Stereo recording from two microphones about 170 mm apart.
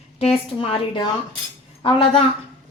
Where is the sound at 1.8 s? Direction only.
30° left (ahead or behind).